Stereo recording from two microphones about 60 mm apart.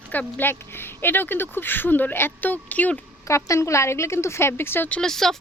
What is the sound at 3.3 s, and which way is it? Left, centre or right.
Speech, left.